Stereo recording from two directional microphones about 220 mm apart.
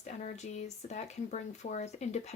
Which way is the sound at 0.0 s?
30° left (ahead or behind).